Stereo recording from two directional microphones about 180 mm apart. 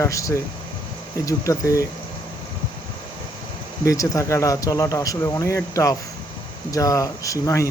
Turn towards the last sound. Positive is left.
turn(degrees=15)  # may be behind; listen again after turning